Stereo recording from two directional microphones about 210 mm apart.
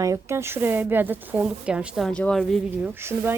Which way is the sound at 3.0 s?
10° right (ahead or behind).